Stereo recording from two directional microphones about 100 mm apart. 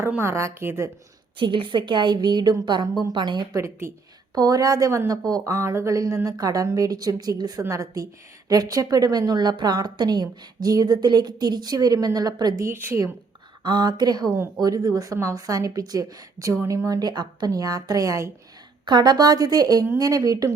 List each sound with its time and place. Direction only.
0.2 s a woman's voice: 25° right (ahead or behind)
1.4 s a woman's voice: 55° right (ahead or behind)
3.5 s a woman's voice: 25° right (ahead or behind)
4.4 s a woman's voice: 40° right (ahead or behind)
12.6 s a woman's voice: 25° right (ahead or behind)
13.7 s a woman's voice: 45° right (ahead or behind)
18.9 s a woman's voice: 45° right (ahead or behind)